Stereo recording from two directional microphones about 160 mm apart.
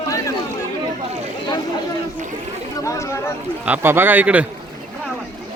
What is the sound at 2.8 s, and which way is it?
Chatter, 20° left (ahead or behind).